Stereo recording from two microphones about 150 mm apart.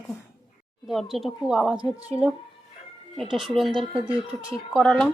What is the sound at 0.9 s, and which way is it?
Speech, centre (ahead or behind).